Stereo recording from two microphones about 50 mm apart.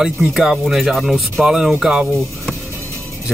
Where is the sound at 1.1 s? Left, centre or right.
Centre.